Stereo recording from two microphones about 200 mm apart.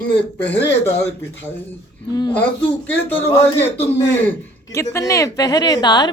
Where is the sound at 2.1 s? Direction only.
20° left (ahead or behind).